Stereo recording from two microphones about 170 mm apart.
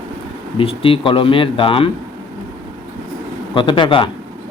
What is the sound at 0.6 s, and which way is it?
Speech, 35° left (ahead or behind).